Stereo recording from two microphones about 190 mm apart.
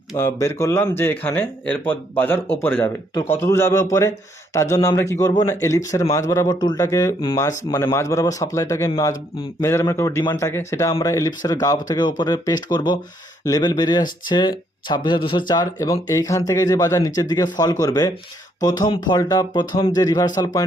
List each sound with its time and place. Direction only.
0.1 s speech: 15° left (ahead or behind)